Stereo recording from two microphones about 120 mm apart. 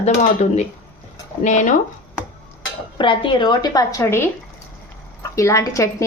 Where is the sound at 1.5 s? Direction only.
90° left.